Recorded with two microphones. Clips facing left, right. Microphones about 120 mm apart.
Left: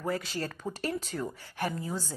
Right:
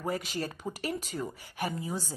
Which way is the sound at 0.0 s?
15° right (ahead or behind).